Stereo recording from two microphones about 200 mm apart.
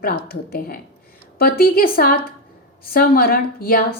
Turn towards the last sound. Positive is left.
turn(degrees=50)  # may be behind; listen again after turning